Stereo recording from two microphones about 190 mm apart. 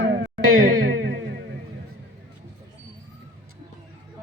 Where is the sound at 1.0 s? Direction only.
70° right (ahead or behind).